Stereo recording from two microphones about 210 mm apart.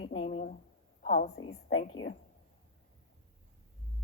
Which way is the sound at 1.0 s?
35° left (ahead or behind).